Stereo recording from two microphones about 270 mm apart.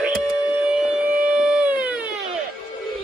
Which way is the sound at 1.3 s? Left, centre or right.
Centre.